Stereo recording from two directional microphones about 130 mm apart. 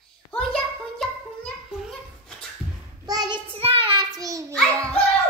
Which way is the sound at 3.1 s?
30° right (ahead or behind).